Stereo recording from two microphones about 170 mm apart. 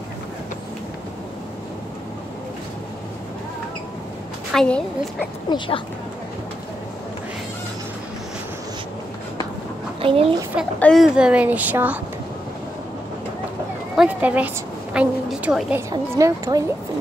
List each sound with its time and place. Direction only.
4.5 s a woman's voice: 5° left (ahead or behind)
5.5 s speech: 25° left (ahead or behind)
10.0 s a child's voice: 35° right (ahead or behind)
10.8 s a child's voice: centre (ahead or behind)
13.9 s a child's voice: 10° right (ahead or behind)
15.9 s a woman's voice: 20° right (ahead or behind)